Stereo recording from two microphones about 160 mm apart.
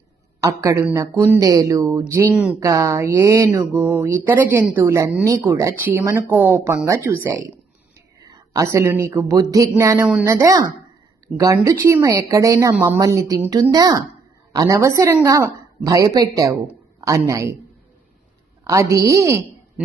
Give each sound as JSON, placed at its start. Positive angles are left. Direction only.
{"t": 0.4, "sound": "speech", "side_deg": -20}
{"t": 2.3, "sound": "speech", "side_deg": -5}
{"t": 2.6, "sound": "speech", "side_deg": -20}
{"t": 12.7, "sound": "a man's voice", "side_deg": -10}
{"t": 18.6, "sound": "speech", "side_deg": -20}